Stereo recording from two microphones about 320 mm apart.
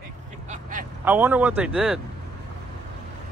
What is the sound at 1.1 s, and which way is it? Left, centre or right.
Speech, centre.